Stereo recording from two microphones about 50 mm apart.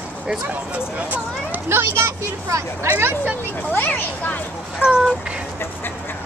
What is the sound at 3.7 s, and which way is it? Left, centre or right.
Speech, left.